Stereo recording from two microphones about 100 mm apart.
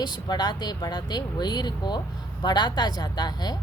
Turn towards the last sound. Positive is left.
turn(degrees=45)  # may be behind; listen again after turning